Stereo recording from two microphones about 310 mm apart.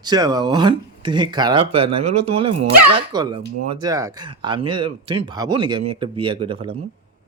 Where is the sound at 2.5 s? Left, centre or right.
Right.